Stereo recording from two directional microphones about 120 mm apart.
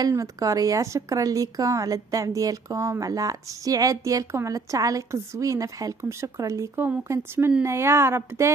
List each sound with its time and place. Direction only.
0.0 s a woman's voice: 30° right (ahead or behind)